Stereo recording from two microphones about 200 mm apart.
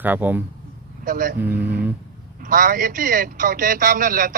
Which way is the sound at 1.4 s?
10° right (ahead or behind).